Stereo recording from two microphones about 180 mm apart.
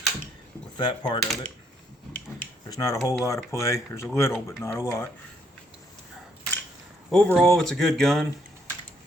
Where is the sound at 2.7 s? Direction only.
20° left (ahead or behind).